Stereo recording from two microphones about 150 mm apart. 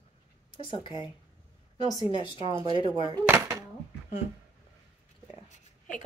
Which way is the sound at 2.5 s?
25° right (ahead or behind).